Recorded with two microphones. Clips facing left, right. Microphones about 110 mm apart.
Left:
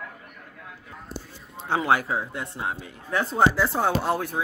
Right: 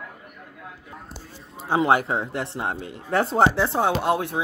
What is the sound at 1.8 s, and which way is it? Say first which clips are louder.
A man's voice: right 3 dB; 25° right (ahead or behind).